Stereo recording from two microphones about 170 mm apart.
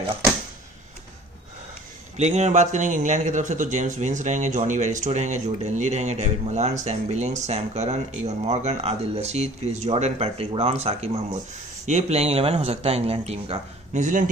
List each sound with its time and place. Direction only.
2.1 s a man's voice: 40° right (ahead or behind)